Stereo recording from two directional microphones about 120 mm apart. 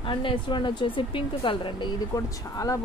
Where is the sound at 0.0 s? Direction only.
45° left (ahead or behind).